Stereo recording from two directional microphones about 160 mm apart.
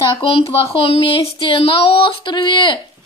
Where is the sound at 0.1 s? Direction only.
35° left (ahead or behind).